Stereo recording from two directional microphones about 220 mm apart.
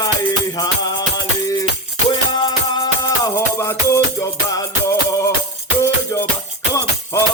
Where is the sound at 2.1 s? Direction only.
20° left (ahead or behind).